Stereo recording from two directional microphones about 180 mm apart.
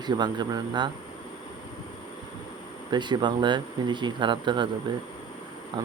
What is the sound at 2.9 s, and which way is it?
Speech, 25° right (ahead or behind).